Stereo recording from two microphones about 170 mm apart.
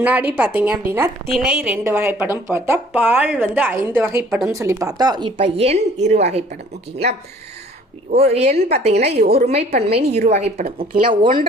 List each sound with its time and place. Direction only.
0.0 s speech: 10° right (ahead or behind)
1.3 s speech: 5° right (ahead or behind); by 6.4 s 40° right (ahead or behind)
8.1 s a woman's voice: 35° right (ahead or behind)
11.1 s speech: 30° right (ahead or behind)